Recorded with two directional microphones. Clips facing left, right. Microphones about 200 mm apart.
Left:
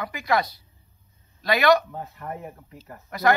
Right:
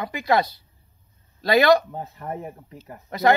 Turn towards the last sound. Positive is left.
turn(degrees=-25)  # may be behind; listen again after turning